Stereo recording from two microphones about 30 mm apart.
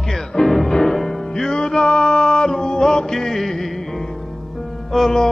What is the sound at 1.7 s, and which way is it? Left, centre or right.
Music, left.